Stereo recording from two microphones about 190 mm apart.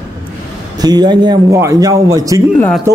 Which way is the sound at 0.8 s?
20° right (ahead or behind).